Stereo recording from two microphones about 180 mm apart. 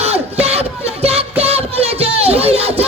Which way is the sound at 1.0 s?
35° right (ahead or behind).